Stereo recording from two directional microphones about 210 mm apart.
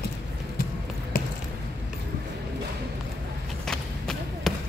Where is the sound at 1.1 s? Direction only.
45° left (ahead or behind).